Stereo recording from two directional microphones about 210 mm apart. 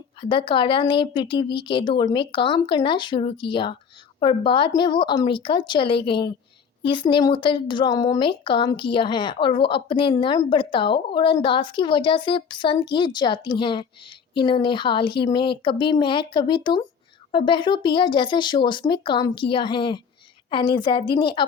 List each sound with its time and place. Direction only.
0.2 s speech: 25° left (ahead or behind)